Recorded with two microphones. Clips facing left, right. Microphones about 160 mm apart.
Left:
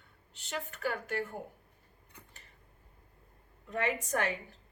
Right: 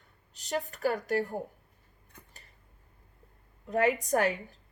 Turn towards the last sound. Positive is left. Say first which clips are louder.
# right 6 dB
turn(degrees=-35)  # may be behind; listen again after turning